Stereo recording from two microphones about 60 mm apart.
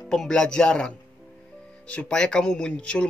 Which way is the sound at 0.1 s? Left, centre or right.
Centre.